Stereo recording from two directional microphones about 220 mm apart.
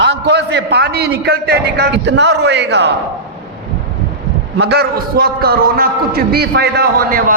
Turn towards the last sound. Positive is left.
turn(degrees=-40)  # may be behind; listen again after turning